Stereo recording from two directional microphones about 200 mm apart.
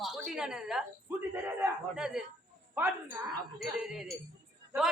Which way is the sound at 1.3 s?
10° right (ahead or behind).